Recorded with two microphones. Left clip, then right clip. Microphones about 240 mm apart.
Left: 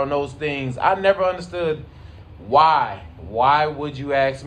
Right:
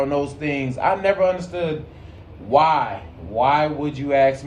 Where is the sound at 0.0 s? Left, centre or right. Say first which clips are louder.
Even; centre.